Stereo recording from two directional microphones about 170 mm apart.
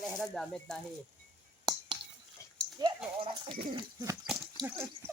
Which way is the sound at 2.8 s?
20° right (ahead or behind).